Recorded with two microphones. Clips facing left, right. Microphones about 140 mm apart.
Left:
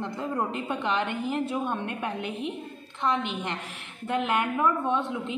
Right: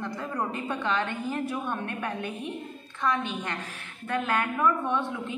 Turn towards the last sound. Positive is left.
turn(degrees=20)  # may be behind; listen again after turning